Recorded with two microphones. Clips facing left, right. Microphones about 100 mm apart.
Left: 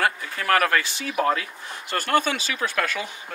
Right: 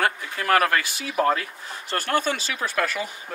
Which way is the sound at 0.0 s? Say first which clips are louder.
Even; 15° right (ahead or behind).